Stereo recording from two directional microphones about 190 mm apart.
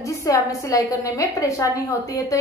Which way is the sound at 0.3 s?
15° left (ahead or behind).